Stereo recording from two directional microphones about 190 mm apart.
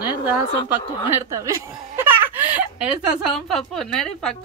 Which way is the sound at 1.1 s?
15° right (ahead or behind).